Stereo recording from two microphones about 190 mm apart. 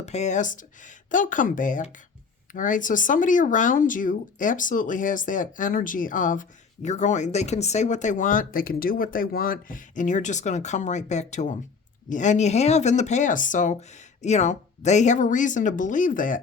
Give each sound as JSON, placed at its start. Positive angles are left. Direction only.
{"t": 0.0, "sound": "speech", "side_deg": 35}